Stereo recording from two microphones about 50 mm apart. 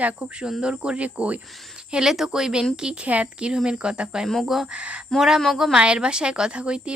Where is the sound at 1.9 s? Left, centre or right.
Centre.